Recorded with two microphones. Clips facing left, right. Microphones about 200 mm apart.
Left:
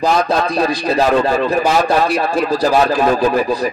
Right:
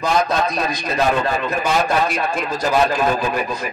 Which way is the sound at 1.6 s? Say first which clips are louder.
Left 4 dB; 35° left (ahead or behind).